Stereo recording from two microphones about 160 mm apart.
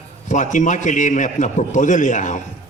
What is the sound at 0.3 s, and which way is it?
A man's voice, 50° left (ahead or behind).